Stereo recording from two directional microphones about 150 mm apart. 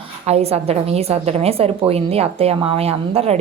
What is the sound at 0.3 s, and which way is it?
A woman's voice, 45° right (ahead or behind).